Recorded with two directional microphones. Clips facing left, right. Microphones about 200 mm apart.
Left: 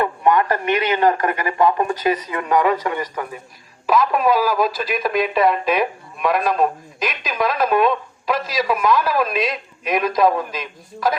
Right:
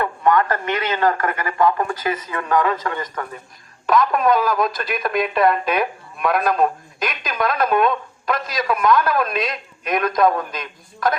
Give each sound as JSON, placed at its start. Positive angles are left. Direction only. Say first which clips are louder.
{"t": 0.0, "sound": "speech", "louder": "left 1 dB", "side_deg": 15}